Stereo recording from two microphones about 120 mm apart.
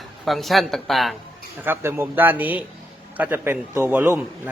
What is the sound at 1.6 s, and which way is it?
A man's voice, 20° right (ahead or behind).